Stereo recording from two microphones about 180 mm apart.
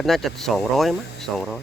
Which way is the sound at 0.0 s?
Centre (ahead or behind).